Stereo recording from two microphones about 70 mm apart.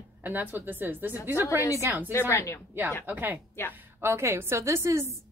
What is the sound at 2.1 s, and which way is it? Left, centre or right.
Speech, left.